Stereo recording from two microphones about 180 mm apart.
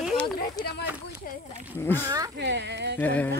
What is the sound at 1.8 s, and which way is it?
Yodeling, 10° left (ahead or behind).